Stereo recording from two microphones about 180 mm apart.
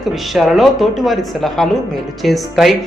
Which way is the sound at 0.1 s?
Centre (ahead or behind).